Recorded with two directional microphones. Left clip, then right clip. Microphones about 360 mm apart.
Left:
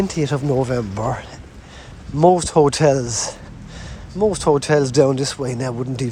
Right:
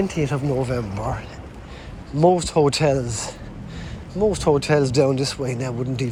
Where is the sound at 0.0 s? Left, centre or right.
Left.